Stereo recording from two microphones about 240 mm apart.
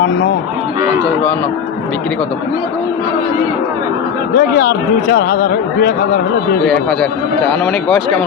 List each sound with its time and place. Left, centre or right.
4.4 s speech: left
6.7 s speech: centre